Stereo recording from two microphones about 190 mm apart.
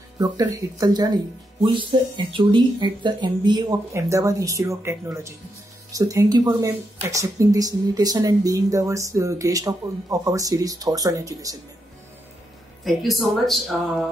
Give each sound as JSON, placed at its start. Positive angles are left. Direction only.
{"t": 0.2, "sound": "speech", "side_deg": -20}
{"t": 12.8, "sound": "speech", "side_deg": 0}